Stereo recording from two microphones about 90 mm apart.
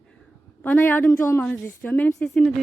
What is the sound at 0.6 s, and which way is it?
A woman's voice, 20° left (ahead or behind).